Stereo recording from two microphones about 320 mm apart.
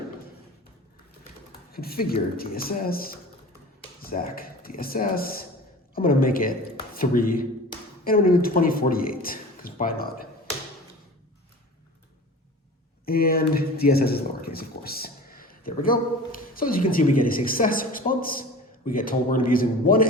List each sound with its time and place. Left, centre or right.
1.7 s speech: left
13.1 s speech: left